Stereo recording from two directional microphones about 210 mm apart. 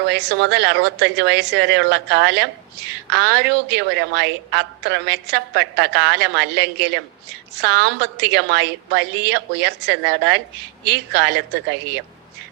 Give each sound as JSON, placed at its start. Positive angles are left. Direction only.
{"t": 0.0, "sound": "a woman's voice", "side_deg": -55}